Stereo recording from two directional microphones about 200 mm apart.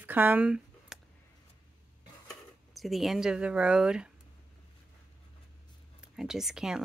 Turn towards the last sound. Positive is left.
turn(degrees=0)  # may be behind; listen again after turning